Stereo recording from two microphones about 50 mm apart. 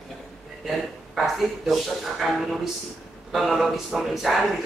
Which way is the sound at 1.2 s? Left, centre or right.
Centre.